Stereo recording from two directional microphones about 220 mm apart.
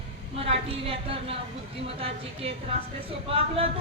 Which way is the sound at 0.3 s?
25° right (ahead or behind).